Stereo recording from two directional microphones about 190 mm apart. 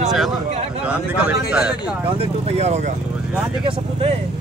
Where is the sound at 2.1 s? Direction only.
30° right (ahead or behind).